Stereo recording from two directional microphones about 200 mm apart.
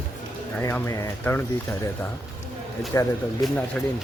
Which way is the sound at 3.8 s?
5° left (ahead or behind).